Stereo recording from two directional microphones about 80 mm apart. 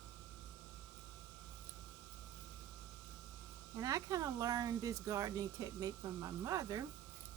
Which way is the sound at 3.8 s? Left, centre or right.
Right.